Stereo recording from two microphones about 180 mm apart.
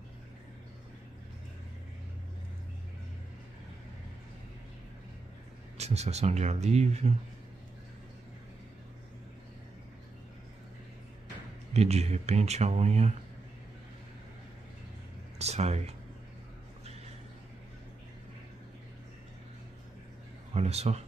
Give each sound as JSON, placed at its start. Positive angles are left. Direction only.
{"t": 5.8, "sound": "speech", "side_deg": -35}
{"t": 11.7, "sound": "speech", "side_deg": -35}
{"t": 15.3, "sound": "a sound", "side_deg": -35}
{"t": 20.5, "sound": "speech", "side_deg": -35}